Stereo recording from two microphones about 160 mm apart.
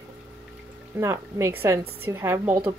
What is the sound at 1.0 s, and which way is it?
A woman's voice, 15° right (ahead or behind).